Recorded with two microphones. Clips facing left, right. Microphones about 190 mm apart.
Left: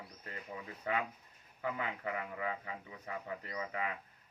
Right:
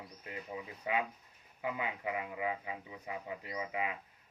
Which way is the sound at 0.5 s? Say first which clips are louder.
Right 1 dB; 15° right (ahead or behind).